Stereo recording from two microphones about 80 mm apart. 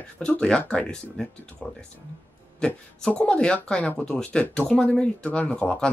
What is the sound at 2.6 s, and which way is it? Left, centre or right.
Speech, centre.